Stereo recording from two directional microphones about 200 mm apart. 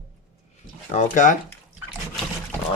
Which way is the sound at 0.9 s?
40° left (ahead or behind).